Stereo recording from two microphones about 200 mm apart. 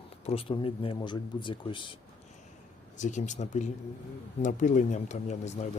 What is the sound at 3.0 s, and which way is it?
Speech, 35° left (ahead or behind).